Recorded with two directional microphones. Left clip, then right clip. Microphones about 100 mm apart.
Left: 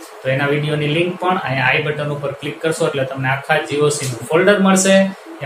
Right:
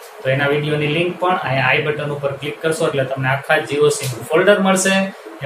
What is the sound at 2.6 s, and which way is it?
Speech, 30° left (ahead or behind).